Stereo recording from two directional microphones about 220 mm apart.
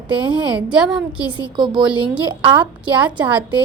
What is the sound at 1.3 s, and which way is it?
A woman's voice, 20° right (ahead or behind).